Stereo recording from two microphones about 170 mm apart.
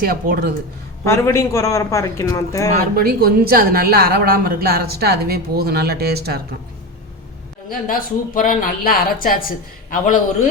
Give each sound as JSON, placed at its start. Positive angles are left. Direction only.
{"t": 0.0, "sound": "a woman's voice", "side_deg": -60}
{"t": 1.0, "sound": "a man's voice", "side_deg": 15}
{"t": 2.9, "sound": "a woman's voice", "side_deg": -60}
{"t": 7.7, "sound": "speech", "side_deg": 55}